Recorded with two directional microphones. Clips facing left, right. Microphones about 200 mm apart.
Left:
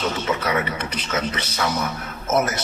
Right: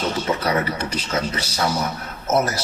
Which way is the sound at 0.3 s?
35° right (ahead or behind).